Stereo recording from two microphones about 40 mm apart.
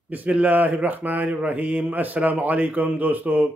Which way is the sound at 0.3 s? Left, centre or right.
Right.